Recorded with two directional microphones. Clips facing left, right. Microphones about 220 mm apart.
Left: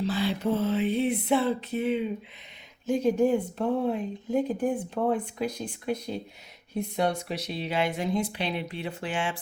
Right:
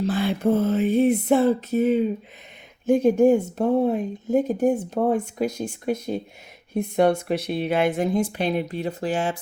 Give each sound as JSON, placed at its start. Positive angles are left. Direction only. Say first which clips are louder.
{"t": 0.0, "sound": "speech", "louder": "right 5 dB", "side_deg": -50}
{"t": 2.8, "sound": "speech", "louder": "right 7 dB", "side_deg": -55}